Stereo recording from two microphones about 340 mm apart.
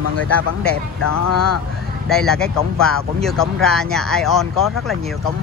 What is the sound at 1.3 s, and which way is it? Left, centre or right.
Speech, left.